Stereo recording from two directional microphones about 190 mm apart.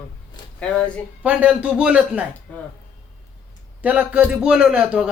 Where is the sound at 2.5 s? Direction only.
5° left (ahead or behind).